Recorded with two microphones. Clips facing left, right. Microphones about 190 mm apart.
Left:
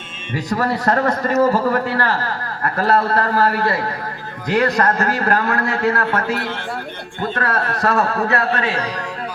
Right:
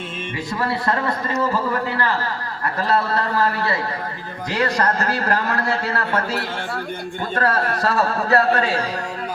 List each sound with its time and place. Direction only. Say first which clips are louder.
0.3 s a man's voice: left 5 dB; 40° left (ahead or behind); by 8.7 s 60° left (ahead or behind)